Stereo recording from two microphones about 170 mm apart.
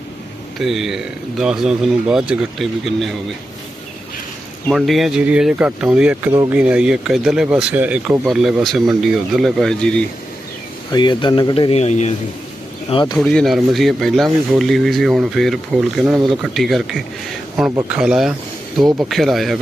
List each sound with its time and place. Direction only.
0.6 s speech: centre (ahead or behind)
4.7 s speech: centre (ahead or behind)
10.9 s speech: 25° left (ahead or behind)
12.9 s speech: 30° left (ahead or behind)
13.1 s speech: 5° left (ahead or behind)